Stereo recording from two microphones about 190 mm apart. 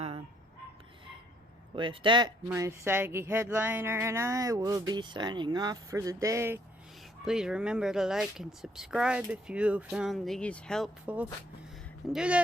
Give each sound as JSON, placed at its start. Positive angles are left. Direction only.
{"t": 1.7, "sound": "speech", "side_deg": -25}
{"t": 2.5, "sound": "speech", "side_deg": -15}
{"t": 7.3, "sound": "speech", "side_deg": -5}
{"t": 11.0, "sound": "speech", "side_deg": -10}